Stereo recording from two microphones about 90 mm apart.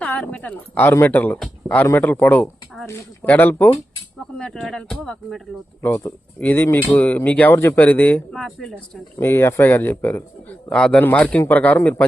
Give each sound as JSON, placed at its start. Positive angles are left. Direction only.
{"t": 0.0, "sound": "speech", "side_deg": 15}
{"t": 4.6, "sound": "speech", "side_deg": 5}
{"t": 5.8, "sound": "speech", "side_deg": 30}
{"t": 8.3, "sound": "speech", "side_deg": 5}
{"t": 9.1, "sound": "speech", "side_deg": 25}
{"t": 10.7, "sound": "a man's voice", "side_deg": 10}